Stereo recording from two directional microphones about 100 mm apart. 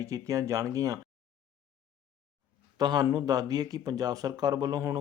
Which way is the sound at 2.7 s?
40° right (ahead or behind).